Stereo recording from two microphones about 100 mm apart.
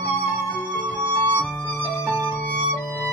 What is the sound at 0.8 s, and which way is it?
Music, 15° left (ahead or behind).